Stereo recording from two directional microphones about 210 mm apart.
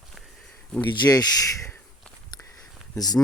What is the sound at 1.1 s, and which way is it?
Speech, 15° left (ahead or behind).